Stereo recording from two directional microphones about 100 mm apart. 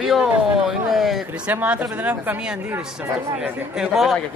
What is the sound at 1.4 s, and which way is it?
A woman's voice, 15° right (ahead or behind).